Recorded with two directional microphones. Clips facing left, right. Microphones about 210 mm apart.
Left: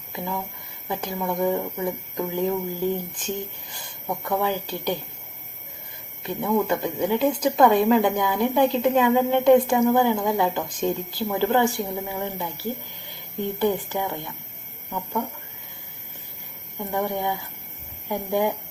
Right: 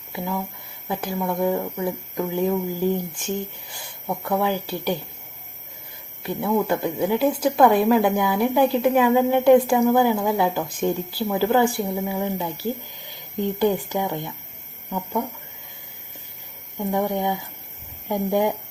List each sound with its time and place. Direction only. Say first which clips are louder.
0.9 s speech: right 2 dB; 5° right (ahead or behind)
6.2 s speech: right 1 dB; 10° right (ahead or behind)
16.9 s speech: right 3 dB; 15° right (ahead or behind)